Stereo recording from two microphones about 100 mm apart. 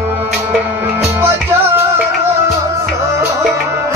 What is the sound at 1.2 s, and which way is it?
Music, 25° right (ahead or behind).